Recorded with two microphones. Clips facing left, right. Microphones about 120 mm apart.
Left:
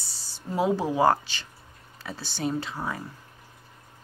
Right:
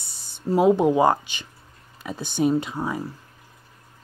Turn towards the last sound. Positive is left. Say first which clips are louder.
# right 6 dB
turn(degrees=-15)  # may be behind; listen again after turning